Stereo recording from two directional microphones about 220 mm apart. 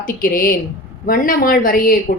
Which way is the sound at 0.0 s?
40° left (ahead or behind).